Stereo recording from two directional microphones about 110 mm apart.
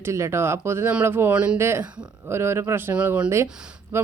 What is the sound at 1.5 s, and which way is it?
Speech, 25° right (ahead or behind).